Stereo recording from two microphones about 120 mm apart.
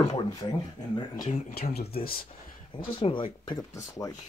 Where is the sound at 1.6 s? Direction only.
60° left (ahead or behind).